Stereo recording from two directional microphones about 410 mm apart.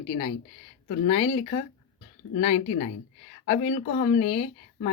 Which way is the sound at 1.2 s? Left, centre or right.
Centre.